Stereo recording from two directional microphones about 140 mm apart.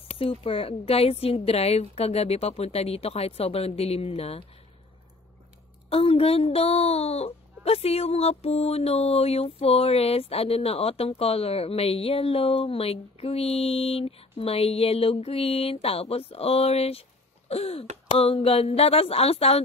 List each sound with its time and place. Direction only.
0.1 s speech: 45° left (ahead or behind)
5.9 s speech: 45° left (ahead or behind)